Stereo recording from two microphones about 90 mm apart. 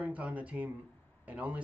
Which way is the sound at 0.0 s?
15° right (ahead or behind).